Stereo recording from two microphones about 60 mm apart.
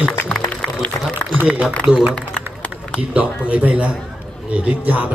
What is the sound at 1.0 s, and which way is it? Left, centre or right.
Speech, left.